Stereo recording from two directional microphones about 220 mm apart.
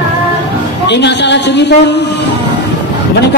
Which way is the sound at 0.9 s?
50° left (ahead or behind).